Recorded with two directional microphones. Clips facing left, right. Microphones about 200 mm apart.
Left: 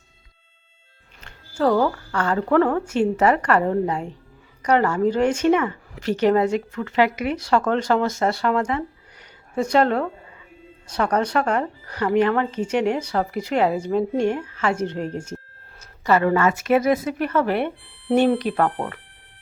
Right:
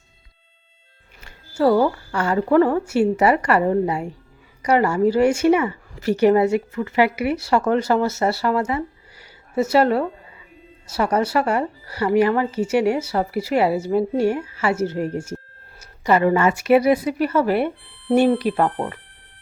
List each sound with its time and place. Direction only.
1.2 s speech: 10° right (ahead or behind)
18.6 s speech: 20° right (ahead or behind)